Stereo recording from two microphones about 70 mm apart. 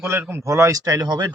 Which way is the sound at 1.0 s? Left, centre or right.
Right.